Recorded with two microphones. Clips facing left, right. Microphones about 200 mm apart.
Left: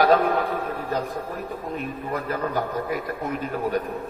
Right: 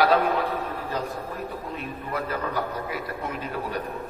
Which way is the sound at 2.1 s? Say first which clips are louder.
Left 2 dB; 40° left (ahead or behind).